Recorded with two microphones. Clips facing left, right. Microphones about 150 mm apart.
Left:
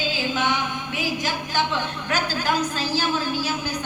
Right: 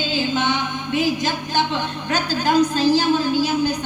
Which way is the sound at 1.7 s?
20° right (ahead or behind).